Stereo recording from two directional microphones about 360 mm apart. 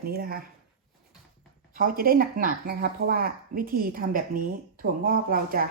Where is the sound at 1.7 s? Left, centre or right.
Right.